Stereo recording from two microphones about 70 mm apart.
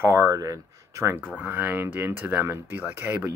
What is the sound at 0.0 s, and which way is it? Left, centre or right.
Speech, right.